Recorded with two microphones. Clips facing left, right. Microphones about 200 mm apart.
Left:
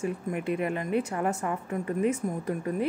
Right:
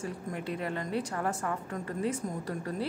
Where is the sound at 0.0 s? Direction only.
15° left (ahead or behind).